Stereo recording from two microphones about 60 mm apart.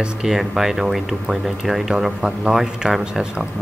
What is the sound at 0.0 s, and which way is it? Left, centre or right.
Speech, centre.